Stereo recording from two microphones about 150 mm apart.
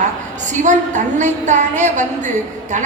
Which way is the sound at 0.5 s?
55° right (ahead or behind).